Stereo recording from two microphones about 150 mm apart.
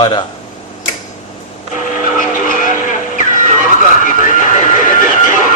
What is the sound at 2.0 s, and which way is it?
Vehicle, 65° left (ahead or behind).